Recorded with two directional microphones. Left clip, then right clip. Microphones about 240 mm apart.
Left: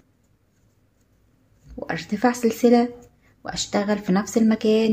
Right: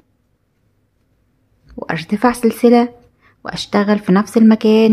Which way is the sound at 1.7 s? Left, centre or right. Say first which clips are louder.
Right 7 dB; right.